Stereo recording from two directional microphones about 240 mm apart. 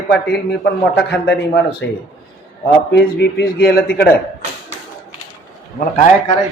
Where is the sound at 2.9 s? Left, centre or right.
Left.